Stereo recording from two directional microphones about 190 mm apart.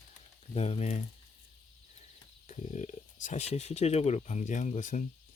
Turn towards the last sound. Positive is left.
turn(degrees=40)  # may be behind; listen again after turning